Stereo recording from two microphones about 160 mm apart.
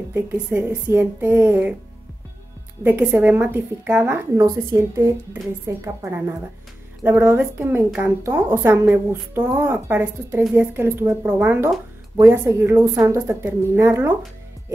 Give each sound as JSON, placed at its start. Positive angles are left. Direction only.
{"t": 0.1, "sound": "a woman's voice", "side_deg": -15}
{"t": 2.8, "sound": "a woman's voice", "side_deg": -10}